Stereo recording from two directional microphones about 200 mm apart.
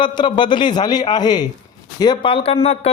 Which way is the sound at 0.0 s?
20° left (ahead or behind).